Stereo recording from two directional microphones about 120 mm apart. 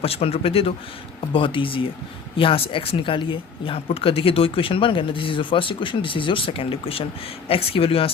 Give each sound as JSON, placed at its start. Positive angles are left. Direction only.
{"t": 0.0, "sound": "speech", "side_deg": 55}